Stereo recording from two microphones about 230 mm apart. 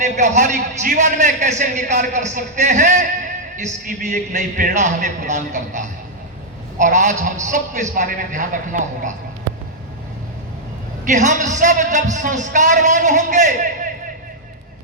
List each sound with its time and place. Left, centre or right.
0.0 s a man's voice: right
11.1 s a man's voice: right